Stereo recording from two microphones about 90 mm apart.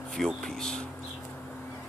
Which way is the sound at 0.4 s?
5° left (ahead or behind).